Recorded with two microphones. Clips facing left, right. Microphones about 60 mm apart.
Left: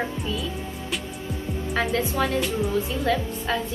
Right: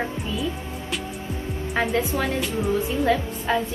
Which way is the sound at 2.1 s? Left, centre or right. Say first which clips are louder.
Left 1 dB; centre.